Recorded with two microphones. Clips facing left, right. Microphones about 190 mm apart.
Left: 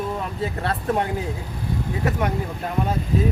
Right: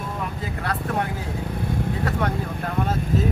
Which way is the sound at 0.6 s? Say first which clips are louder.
Left 2 dB; 25° left (ahead or behind).